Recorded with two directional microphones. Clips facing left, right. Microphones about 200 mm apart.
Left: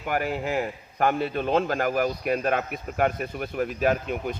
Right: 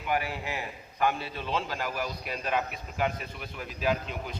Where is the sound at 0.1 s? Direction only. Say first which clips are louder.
Left 5 dB; 50° left (ahead or behind).